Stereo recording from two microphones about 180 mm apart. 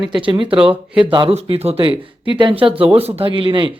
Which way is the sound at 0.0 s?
25° right (ahead or behind).